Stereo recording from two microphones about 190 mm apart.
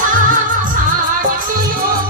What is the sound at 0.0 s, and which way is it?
Music, 45° right (ahead or behind).